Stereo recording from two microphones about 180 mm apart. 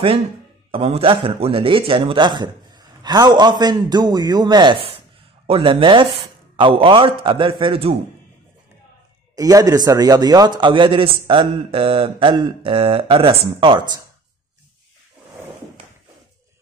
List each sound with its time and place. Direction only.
0.7 s a man's voice: 35° right (ahead or behind)
9.3 s a man's voice: 20° right (ahead or behind)